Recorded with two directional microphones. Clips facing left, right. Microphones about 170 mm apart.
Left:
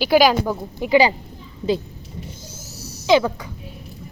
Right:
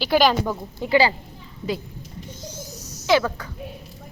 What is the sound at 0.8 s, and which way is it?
Speech, 15° left (ahead or behind).